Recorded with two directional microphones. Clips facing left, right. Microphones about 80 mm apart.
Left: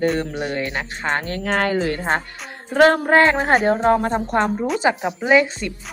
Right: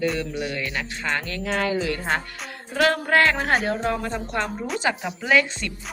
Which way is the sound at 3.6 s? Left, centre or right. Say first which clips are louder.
Left 8 dB; left.